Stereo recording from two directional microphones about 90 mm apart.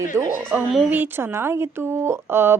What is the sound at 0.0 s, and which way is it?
Speech, 35° right (ahead or behind).